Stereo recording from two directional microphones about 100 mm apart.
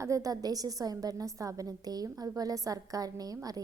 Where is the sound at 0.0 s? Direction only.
35° right (ahead or behind).